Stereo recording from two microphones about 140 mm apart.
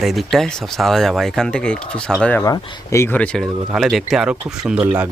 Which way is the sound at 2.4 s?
20° left (ahead or behind).